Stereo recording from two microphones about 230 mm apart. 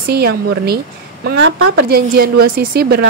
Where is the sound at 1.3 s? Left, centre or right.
Right.